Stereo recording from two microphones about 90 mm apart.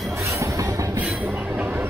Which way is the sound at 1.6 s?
25° right (ahead or behind).